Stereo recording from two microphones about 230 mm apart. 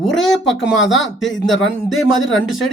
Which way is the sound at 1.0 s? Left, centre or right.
Centre.